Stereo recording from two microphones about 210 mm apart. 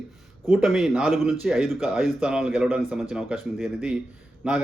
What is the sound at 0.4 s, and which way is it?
Speech, centre (ahead or behind).